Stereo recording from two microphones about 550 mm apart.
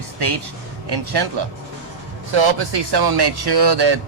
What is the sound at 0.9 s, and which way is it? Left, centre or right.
Speech, right.